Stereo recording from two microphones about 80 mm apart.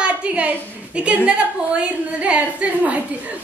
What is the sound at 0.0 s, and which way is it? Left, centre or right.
A woman's voice, centre.